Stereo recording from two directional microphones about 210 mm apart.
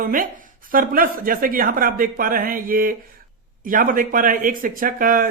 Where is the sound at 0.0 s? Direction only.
40° right (ahead or behind).